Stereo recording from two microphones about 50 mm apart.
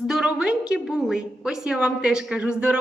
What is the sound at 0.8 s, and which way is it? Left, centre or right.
A woman's voice, centre.